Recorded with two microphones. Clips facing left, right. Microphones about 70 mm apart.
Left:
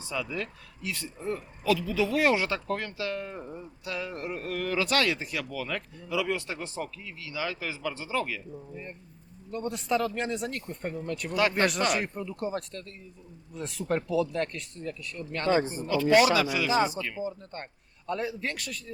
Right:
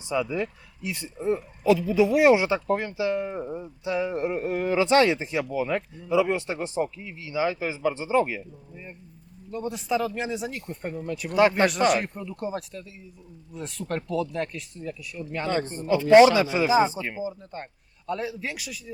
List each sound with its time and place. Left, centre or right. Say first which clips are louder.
0.1 s speech: right 7 dB; right
8.7 s speech: left 1 dB; centre
15.4 s speech: left 3 dB; centre
15.9 s speech: right 7 dB; right
17.2 s speech: right 2 dB; centre